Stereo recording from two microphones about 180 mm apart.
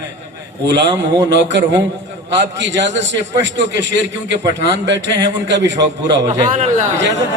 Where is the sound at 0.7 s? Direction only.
75° right (ahead or behind).